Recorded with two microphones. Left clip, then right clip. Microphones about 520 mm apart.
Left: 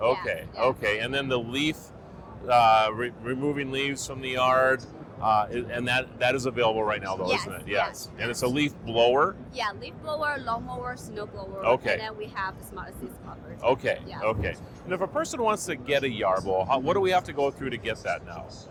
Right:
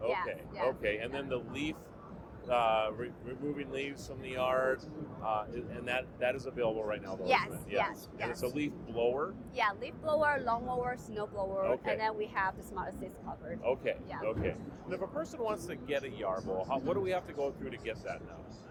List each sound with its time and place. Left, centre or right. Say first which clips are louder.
0.8 s speech: left 8 dB; left
7.3 s speech: right 1 dB; right
8.3 s speech: left 11 dB; left
9.6 s speech: right 1 dB; centre
13.6 s speech: left 10 dB; left